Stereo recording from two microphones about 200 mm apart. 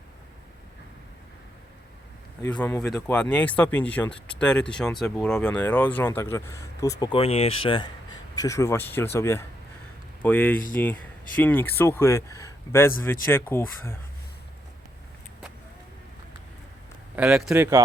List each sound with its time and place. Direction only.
2.5 s speech: 5° left (ahead or behind)
7.0 s speech: 25° left (ahead or behind)
8.4 s speech: 15° left (ahead or behind)
17.2 s speech: 5° right (ahead or behind)